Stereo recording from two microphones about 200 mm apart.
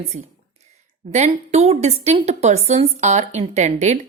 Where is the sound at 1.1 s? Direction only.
30° right (ahead or behind).